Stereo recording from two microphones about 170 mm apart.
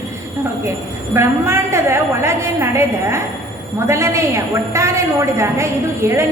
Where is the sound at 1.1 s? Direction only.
15° right (ahead or behind).